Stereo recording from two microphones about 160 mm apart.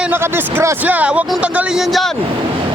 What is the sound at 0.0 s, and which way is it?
Speech, 15° right (ahead or behind).